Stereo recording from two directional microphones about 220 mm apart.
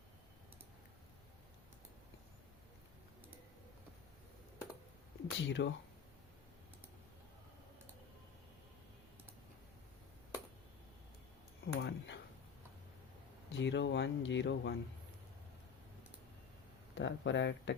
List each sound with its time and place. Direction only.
5.4 s speech: 55° left (ahead or behind)
11.6 s a sound: 50° left (ahead or behind)
13.5 s speech: 55° left (ahead or behind)
16.9 s speech: 55° left (ahead or behind)